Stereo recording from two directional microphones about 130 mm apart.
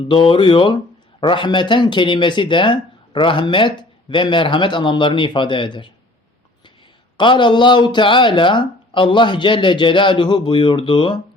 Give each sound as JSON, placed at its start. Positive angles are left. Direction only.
{"t": 0.1, "sound": "speech", "side_deg": 40}
{"t": 7.2, "sound": "speech", "side_deg": 40}